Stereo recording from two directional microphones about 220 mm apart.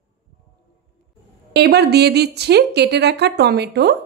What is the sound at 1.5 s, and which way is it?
A woman's voice, 50° right (ahead or behind).